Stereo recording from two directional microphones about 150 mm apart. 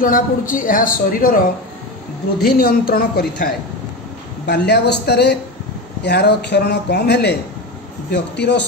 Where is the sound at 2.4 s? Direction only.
80° left.